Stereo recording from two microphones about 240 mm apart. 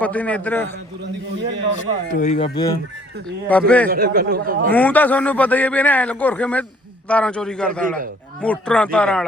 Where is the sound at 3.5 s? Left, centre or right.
Centre.